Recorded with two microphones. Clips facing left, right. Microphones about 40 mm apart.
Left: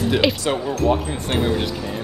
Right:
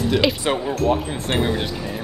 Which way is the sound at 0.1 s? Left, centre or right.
Centre.